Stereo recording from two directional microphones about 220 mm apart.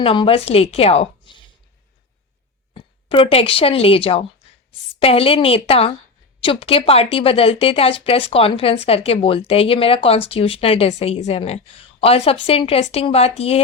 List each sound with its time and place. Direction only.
0.0 s a woman's voice: 25° left (ahead or behind)
3.1 s a woman's voice: 25° left (ahead or behind)